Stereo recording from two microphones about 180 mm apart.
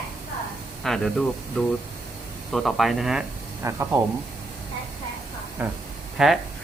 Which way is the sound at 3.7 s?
15° right (ahead or behind).